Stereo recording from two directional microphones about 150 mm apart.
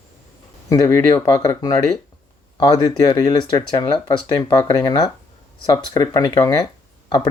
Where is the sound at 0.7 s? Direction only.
25° left (ahead or behind).